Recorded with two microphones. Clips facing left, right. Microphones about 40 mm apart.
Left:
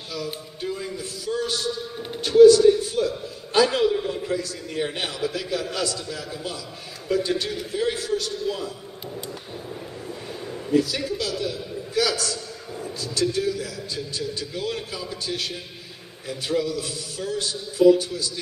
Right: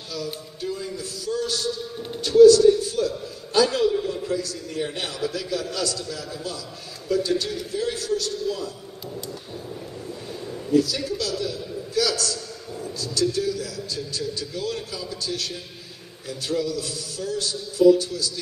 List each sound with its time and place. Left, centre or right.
0.1 s a sound: centre
3.5 s a man's voice: left
10.7 s a man's voice: left